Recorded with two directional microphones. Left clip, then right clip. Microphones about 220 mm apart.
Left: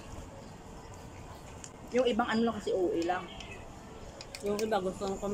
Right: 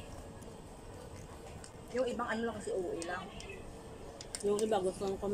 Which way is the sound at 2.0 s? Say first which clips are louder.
Left 6 dB; 15° left (ahead or behind).